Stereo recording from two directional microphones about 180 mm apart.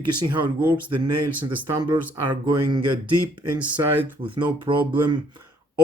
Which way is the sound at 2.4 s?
25° right (ahead or behind).